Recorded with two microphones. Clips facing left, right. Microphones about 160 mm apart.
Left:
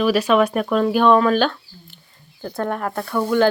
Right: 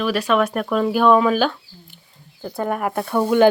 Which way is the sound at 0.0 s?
5° left (ahead or behind).